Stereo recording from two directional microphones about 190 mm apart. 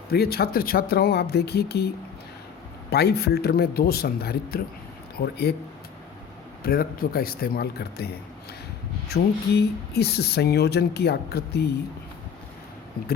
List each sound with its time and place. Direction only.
0.1 s speech: 55° left (ahead or behind)
2.9 s speech: 60° left (ahead or behind)
6.6 s speech: 50° left (ahead or behind)